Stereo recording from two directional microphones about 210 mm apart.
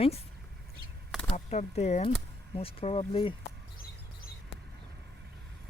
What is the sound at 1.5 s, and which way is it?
Speech, 30° left (ahead or behind).